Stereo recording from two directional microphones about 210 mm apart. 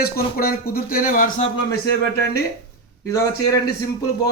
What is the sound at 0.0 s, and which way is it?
Speech, 45° left (ahead or behind).